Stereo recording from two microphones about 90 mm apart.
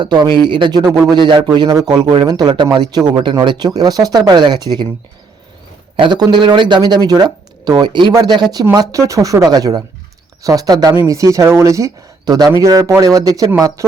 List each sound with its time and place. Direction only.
0.0 s speech: 55° right (ahead or behind)
0.8 s speech: 45° right (ahead or behind)
1.1 s speech: 55° right (ahead or behind)
6.0 s speech: 50° right (ahead or behind)
8.7 s speech: 45° right (ahead or behind)
12.2 s speech: 50° right (ahead or behind)